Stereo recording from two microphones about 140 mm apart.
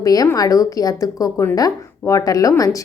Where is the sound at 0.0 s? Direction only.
25° left (ahead or behind).